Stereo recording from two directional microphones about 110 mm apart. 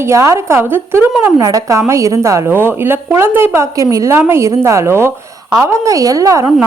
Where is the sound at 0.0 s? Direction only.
25° right (ahead or behind).